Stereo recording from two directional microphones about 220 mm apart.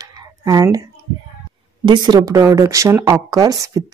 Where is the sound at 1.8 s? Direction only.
20° right (ahead or behind).